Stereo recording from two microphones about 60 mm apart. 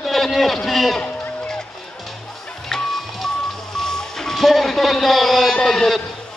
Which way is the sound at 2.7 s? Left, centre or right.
Centre.